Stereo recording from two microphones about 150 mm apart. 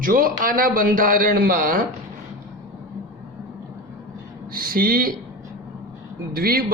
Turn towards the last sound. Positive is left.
turn(degrees=-90)